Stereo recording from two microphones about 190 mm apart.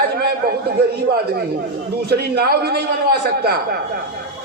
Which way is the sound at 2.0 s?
55° right (ahead or behind).